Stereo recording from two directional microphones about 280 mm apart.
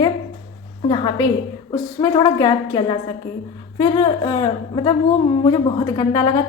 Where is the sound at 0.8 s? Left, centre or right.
Centre.